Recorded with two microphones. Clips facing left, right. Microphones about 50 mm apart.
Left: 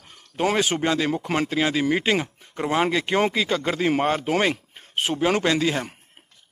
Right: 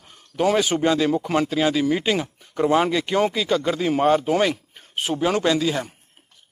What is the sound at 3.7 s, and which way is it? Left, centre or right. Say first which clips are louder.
Speech: right 3 dB; left.